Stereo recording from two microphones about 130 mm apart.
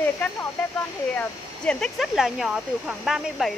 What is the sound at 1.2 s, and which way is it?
Speech, 5° left (ahead or behind).